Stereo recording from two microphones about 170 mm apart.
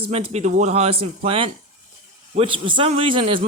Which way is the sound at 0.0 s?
35° right (ahead or behind).